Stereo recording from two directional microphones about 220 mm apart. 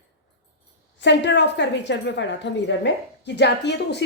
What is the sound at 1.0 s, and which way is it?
A woman's voice, 55° left (ahead or behind).